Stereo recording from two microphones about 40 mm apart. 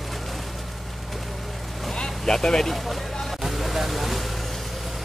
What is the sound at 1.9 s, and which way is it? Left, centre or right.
Vehicle, centre.